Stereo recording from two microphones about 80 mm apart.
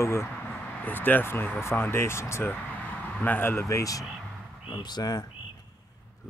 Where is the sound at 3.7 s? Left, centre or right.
Left.